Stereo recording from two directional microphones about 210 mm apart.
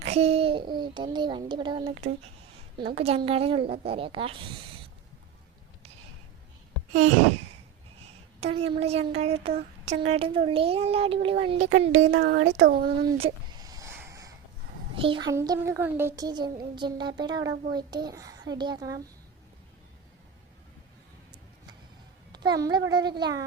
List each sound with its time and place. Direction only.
0.0 s a child's voice: 30° right (ahead or behind)
8.4 s a woman's voice: 30° right (ahead or behind)
11.9 s speech: 65° right (ahead or behind); by 13.1 s 45° right (ahead or behind)
13.1 s a sound: 25° right (ahead or behind)
14.9 s a child's voice: 25° right (ahead or behind)
22.3 s a child's voice: 20° right (ahead or behind)